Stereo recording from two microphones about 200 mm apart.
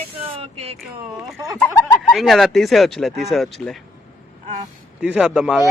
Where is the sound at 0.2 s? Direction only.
30° right (ahead or behind).